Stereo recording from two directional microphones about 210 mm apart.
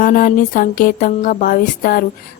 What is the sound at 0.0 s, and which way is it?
Speech, 40° left (ahead or behind).